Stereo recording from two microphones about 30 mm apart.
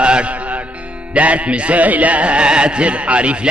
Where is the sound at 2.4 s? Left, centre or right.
Right.